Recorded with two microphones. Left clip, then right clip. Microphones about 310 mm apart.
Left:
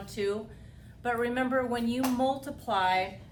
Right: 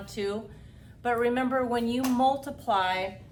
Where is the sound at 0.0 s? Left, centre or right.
Centre.